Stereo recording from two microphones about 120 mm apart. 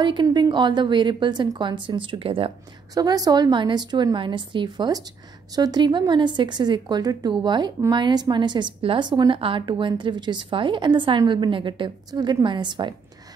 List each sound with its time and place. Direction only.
0.0 s a woman's voice: 40° right (ahead or behind)
2.9 s a woman's voice: 30° right (ahead or behind)